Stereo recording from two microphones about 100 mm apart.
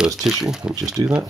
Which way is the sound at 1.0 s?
50° right (ahead or behind).